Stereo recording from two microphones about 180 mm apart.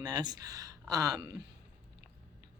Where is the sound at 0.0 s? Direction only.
20° right (ahead or behind).